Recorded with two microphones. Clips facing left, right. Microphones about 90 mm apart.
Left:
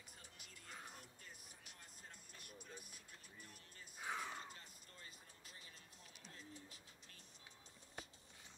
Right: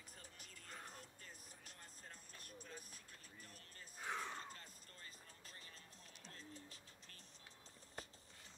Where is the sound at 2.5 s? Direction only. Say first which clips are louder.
Right 1 dB; 35° right (ahead or behind).